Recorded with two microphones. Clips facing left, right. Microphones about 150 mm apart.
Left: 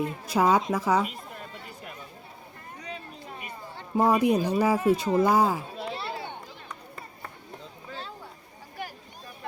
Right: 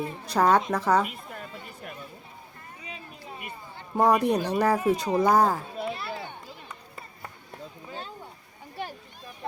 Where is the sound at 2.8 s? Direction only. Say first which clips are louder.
Left 2 dB; 5° right (ahead or behind).